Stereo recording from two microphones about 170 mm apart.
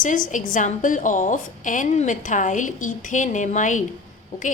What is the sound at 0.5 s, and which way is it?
A woman's voice, 50° left (ahead or behind).